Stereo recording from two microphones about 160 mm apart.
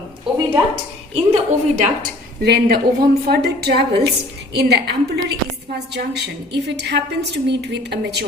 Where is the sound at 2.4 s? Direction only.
80° right.